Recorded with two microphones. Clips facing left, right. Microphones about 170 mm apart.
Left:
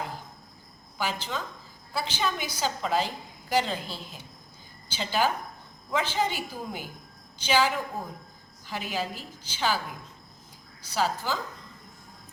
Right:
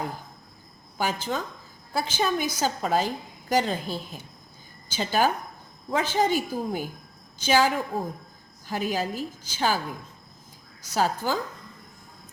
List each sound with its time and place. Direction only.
0.9 s a woman's voice: 50° right (ahead or behind)
10.9 s a woman's voice: 50° right (ahead or behind)